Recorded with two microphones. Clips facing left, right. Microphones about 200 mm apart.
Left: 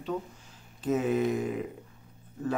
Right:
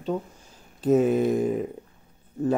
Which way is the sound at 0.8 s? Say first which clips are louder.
Right 7 dB; 45° right (ahead or behind).